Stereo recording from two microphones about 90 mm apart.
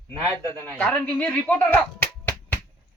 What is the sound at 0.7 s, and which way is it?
Speech, 15° left (ahead or behind).